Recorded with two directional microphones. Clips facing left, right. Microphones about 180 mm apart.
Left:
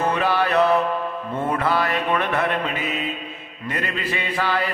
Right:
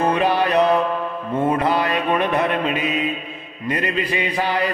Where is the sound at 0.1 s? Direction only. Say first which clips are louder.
Right 3 dB; 20° right (ahead or behind).